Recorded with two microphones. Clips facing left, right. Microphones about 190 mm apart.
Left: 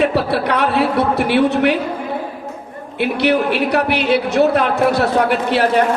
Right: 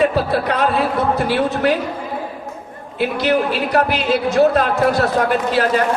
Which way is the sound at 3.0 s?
65° left (ahead or behind).